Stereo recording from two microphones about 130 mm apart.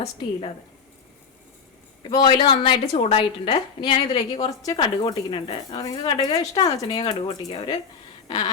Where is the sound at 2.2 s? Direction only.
40° left (ahead or behind).